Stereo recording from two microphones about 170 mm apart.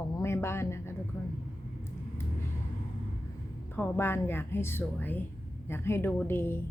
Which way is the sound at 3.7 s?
15° left (ahead or behind).